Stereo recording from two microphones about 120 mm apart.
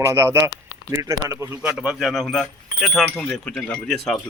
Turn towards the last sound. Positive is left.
turn(degrees=5)  # may be behind; listen again after turning